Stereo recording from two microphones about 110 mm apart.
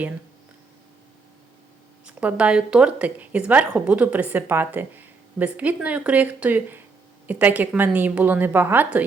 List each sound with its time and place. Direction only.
2.0 s a woman's voice: 10° right (ahead or behind)